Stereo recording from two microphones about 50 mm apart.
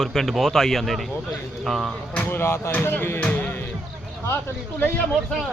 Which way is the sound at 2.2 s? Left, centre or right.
Left.